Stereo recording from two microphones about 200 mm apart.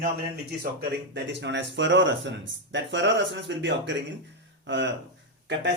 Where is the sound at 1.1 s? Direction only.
60° right (ahead or behind).